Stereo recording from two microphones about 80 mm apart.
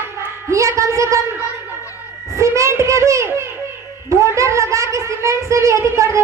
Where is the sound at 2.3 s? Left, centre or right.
Right.